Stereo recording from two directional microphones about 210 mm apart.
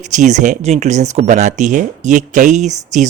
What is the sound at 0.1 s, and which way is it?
Speech, 35° right (ahead or behind).